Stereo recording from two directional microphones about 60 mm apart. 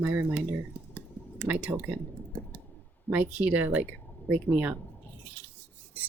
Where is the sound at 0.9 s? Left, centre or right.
Right.